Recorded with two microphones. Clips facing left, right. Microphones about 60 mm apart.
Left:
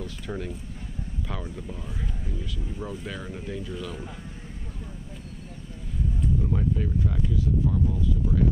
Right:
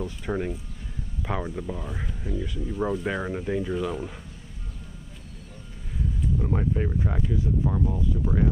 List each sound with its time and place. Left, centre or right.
0.0 s speech: right
1.9 s speech: right
3.1 s speech: right
6.4 s speech: right